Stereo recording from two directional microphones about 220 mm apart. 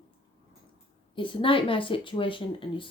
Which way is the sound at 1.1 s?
20° left (ahead or behind).